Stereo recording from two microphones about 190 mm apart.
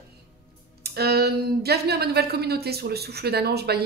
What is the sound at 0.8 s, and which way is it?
Speech, 55° right (ahead or behind).